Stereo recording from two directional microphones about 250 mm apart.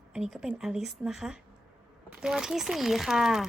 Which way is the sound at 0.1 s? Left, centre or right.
Centre.